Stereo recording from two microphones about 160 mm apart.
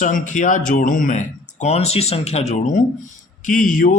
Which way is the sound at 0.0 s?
50° left (ahead or behind).